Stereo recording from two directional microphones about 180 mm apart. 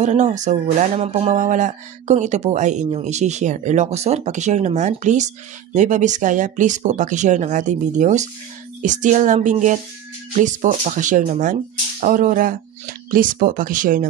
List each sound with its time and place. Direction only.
0.0 s speech: 40° right (ahead or behind)